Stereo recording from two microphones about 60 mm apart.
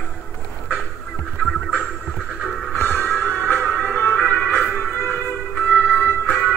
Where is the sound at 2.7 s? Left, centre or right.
Left.